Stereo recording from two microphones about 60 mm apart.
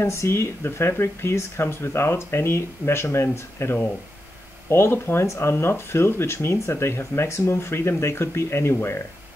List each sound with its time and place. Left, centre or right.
0.0 s speech: left